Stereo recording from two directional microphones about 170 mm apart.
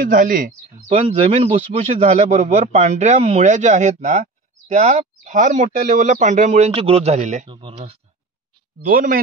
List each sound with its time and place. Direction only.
0.0 s speech: 50° right (ahead or behind)
0.8 s speech: 30° right (ahead or behind)
7.4 s speech: 30° right (ahead or behind)
8.8 s speech: 55° right (ahead or behind)